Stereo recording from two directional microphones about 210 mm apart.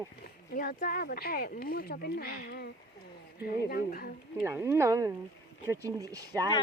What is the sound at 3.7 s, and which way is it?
Speech, 45° left (ahead or behind).